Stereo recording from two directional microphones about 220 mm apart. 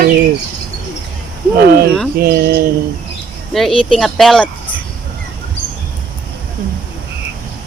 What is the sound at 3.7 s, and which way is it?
Speech, 25° left (ahead or behind).